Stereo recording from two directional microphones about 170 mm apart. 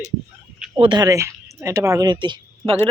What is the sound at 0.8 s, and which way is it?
A woman's voice, 25° right (ahead or behind).